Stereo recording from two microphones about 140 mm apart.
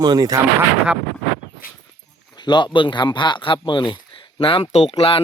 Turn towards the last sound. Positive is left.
turn(degrees=45)  # may be behind; listen again after turning